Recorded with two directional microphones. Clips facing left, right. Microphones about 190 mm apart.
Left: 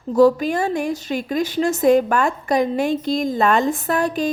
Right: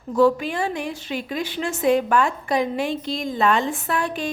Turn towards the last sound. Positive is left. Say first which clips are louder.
# left 5 dB
turn(degrees=40)  # may be behind; listen again after turning